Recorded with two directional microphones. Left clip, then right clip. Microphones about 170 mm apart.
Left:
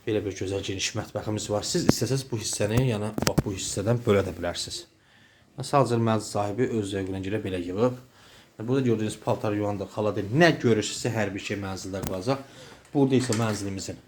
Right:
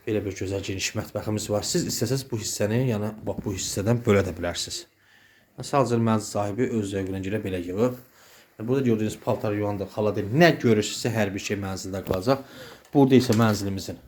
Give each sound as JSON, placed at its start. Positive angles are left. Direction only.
{"t": 0.0, "sound": "speech", "side_deg": -5}
{"t": 12.9, "sound": "speech", "side_deg": -40}